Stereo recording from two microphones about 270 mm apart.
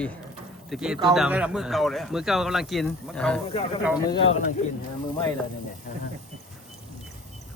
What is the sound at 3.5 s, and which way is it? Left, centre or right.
Speech, left.